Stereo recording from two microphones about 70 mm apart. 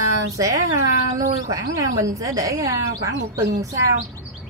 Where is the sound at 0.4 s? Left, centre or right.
Right.